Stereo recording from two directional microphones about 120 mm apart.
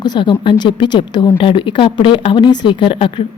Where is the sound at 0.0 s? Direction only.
40° left (ahead or behind).